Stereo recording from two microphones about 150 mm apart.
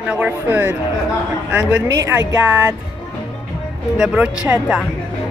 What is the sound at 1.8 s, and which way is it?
Speech, 20° right (ahead or behind).